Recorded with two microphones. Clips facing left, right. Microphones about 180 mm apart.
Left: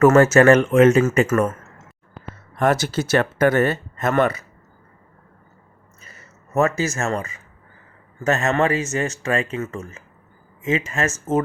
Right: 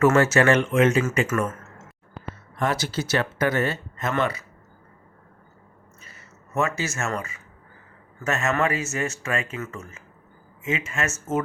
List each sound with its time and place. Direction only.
0.0 s speech: 45° left (ahead or behind)
2.6 s speech: 50° left (ahead or behind)
6.5 s speech: 40° left (ahead or behind)